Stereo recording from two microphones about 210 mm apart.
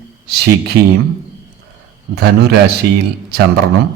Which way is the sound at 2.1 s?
50° right (ahead or behind).